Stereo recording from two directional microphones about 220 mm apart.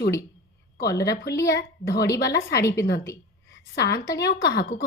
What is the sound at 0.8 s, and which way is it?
Speech, 45° left (ahead or behind).